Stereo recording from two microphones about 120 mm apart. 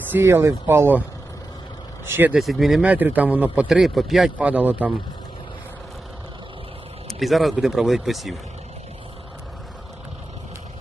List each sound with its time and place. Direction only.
0.1 s speech: 20° right (ahead or behind)
2.0 s speech: 15° right (ahead or behind)
2.4 s speech: centre (ahead or behind)
4.4 s speech: 15° right (ahead or behind)
7.1 s a man's voice: centre (ahead or behind)